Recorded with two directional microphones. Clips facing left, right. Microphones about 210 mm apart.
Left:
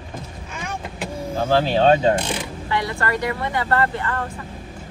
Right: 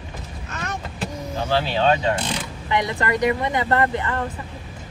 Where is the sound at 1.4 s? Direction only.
45° left (ahead or behind).